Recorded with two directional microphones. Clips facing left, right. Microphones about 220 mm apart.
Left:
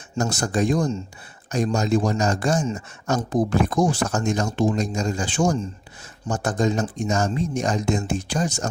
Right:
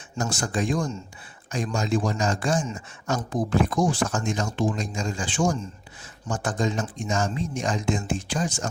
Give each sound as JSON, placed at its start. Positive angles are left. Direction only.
{"t": 0.2, "sound": "speech", "side_deg": 40}